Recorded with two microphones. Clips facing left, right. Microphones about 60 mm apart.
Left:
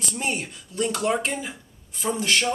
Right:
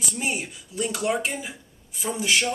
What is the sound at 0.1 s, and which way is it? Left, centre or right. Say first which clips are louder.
Speech: left 1 dB; centre.